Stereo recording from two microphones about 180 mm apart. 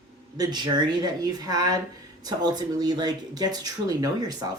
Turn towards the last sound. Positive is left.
turn(degrees=-20)  # may be behind; listen again after turning